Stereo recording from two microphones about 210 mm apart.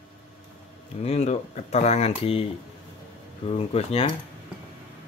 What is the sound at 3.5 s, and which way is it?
Speech, 30° left (ahead or behind).